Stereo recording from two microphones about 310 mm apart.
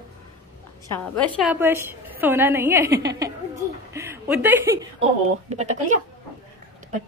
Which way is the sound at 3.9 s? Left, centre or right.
Centre.